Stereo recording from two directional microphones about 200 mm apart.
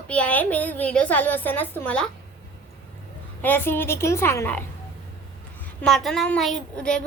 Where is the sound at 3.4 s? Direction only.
10° left (ahead or behind).